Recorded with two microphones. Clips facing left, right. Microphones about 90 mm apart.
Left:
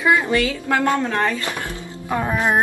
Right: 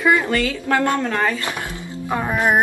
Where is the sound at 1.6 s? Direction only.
15° right (ahead or behind).